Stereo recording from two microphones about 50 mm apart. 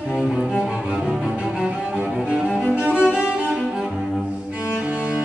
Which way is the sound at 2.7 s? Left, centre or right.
Right.